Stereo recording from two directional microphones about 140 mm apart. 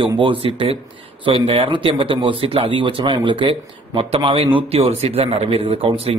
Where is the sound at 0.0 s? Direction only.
40° right (ahead or behind).